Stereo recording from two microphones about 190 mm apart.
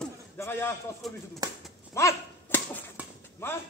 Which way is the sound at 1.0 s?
Centre (ahead or behind).